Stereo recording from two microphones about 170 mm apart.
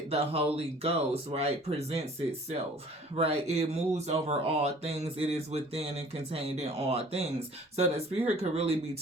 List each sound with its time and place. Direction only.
0.1 s speech: 35° right (ahead or behind)
3.2 s speech: 35° right (ahead or behind)